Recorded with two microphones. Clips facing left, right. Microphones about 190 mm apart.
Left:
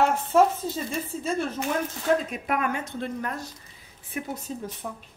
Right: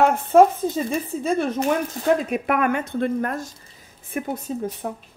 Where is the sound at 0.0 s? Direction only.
55° right (ahead or behind).